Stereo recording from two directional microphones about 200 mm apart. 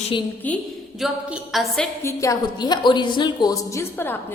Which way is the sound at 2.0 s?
15° left (ahead or behind).